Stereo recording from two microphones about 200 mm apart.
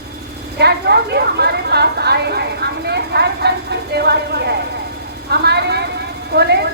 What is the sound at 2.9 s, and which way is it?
Vehicle, 55° right (ahead or behind).